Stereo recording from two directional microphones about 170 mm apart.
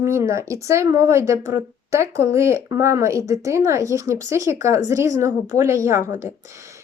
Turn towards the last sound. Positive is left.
turn(degrees=-15)  # may be behind; listen again after turning